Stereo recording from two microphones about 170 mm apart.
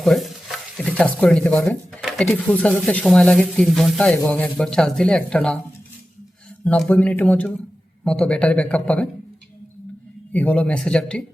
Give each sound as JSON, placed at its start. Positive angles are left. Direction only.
{"t": 0.0, "sound": "stir", "side_deg": 0}
{"t": 2.1, "sound": "speech", "side_deg": 5}
{"t": 6.7, "sound": "speech", "side_deg": 10}
{"t": 10.3, "sound": "speech", "side_deg": 10}